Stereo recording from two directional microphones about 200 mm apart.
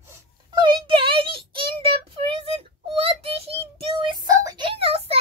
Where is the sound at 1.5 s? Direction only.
25° right (ahead or behind).